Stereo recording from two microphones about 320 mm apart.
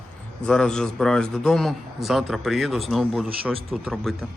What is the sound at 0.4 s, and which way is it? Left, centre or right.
Speech, centre.